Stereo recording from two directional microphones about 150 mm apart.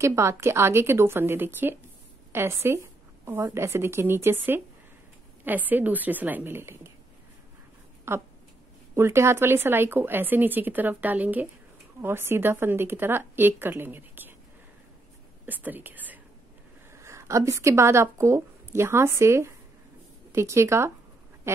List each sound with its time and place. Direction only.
0.0 s speech: 20° right (ahead or behind)
8.1 s speech: 15° right (ahead or behind)
15.4 s speech: 10° right (ahead or behind)